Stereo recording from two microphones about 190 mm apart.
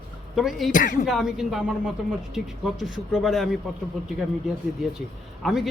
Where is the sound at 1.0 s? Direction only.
Centre (ahead or behind).